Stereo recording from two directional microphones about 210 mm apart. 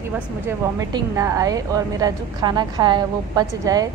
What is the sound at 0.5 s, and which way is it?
A woman's voice, 15° right (ahead or behind).